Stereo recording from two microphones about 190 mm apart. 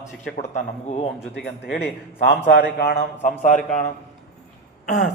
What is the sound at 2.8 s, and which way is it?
Speech, 45° left (ahead or behind).